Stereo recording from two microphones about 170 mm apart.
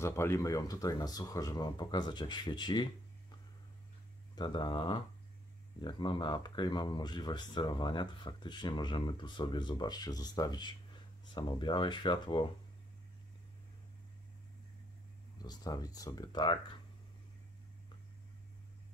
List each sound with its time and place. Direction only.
0.0 s speech: 15° left (ahead or behind)
4.4 s speech: 25° left (ahead or behind)
15.4 s speech: 25° left (ahead or behind)